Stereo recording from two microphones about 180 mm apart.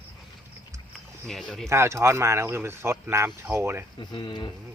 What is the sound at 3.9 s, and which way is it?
Speech, 25° left (ahead or behind).